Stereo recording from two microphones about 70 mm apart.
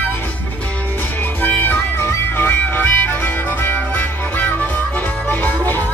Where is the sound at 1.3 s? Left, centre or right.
Left.